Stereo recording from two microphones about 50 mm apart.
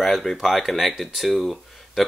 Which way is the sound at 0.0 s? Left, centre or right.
Centre.